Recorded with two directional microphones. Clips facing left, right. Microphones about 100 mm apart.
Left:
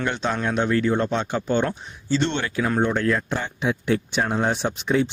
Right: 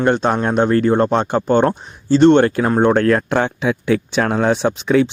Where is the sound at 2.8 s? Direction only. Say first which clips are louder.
Right 10 dB; 60° right (ahead or behind); by 5.1 s 90° right.